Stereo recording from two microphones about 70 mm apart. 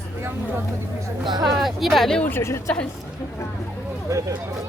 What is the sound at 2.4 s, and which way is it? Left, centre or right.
Speech, left.